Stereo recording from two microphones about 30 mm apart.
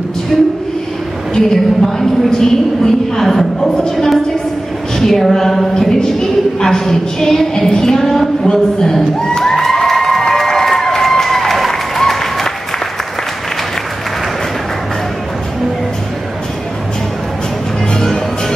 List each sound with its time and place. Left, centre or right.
0.3 s a woman's voice: left
9.7 s a sound: centre
10.3 s applause: centre